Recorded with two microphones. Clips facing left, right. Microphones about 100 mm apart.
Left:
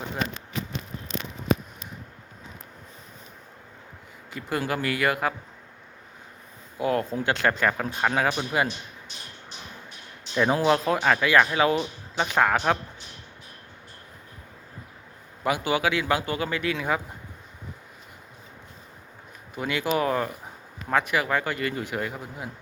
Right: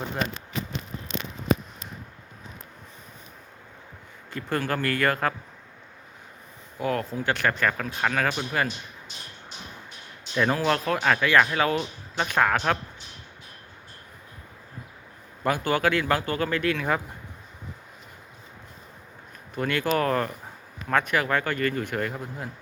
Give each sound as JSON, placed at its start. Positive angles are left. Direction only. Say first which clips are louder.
{"t": 4.3, "sound": "speech", "louder": "even", "side_deg": 5}
{"t": 6.7, "sound": "speech", "louder": "left 2 dB", "side_deg": 20}
{"t": 10.3, "sound": "speech", "louder": "left 2 dB", "side_deg": 15}
{"t": 15.4, "sound": "speech", "louder": "right 1 dB", "side_deg": 10}
{"t": 19.5, "sound": "speech", "louder": "right 1 dB", "side_deg": 10}